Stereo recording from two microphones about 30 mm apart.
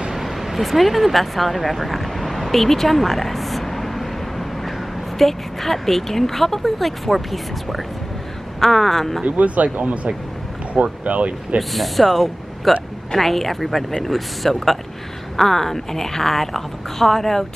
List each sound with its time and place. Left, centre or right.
0.1 s a sound: centre
5.2 s speech: centre
9.2 s speech: right
11.7 s speech: centre